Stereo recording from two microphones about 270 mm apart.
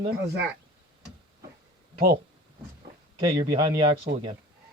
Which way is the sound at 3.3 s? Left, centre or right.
Centre.